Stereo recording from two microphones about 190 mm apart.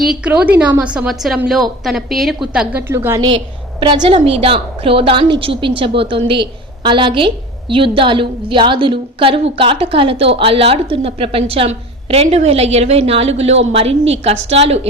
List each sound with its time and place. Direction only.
0.1 s a woman's voice: 5° right (ahead or behind); by 14.6 s 30° right (ahead or behind)